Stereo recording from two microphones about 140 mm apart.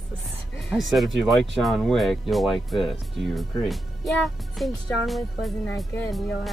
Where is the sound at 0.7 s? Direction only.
Centre (ahead or behind).